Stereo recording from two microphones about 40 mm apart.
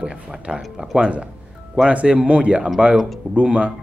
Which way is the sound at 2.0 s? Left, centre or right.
Right.